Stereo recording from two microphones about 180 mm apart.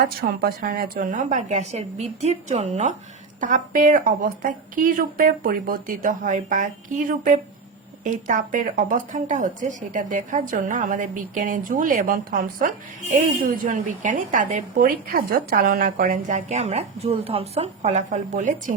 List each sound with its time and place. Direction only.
0.2 s a woman's voice: 55° right (ahead or behind)
8.0 s a woman's voice: 45° right (ahead or behind)